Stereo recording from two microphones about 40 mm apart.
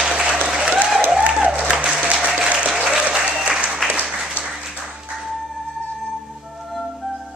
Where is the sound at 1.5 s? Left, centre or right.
Right.